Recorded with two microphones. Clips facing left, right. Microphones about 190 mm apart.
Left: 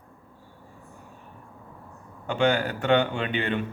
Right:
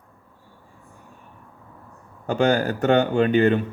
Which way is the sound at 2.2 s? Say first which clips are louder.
Right 4 dB; 40° right (ahead or behind).